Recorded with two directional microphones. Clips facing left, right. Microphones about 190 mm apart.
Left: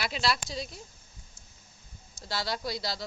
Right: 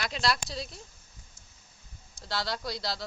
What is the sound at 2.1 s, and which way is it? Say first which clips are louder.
Speech: even; centre (ahead or behind).